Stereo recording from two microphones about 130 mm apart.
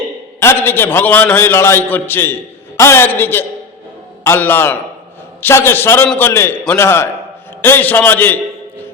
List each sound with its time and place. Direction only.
0.3 s a man's voice: 20° left (ahead or behind)